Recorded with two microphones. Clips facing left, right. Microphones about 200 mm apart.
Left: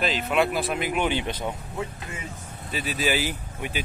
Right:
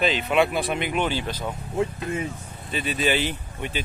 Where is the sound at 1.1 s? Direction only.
20° left (ahead or behind).